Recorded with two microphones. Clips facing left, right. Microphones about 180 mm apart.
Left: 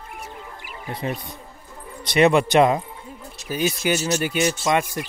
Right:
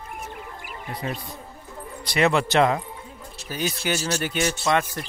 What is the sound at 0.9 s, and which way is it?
Speech, 20° left (ahead or behind).